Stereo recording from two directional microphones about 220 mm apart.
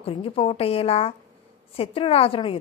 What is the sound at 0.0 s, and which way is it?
A woman's voice, 25° left (ahead or behind).